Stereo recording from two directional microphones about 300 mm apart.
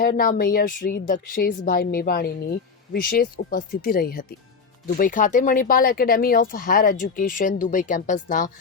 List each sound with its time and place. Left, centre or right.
0.0 s speech: left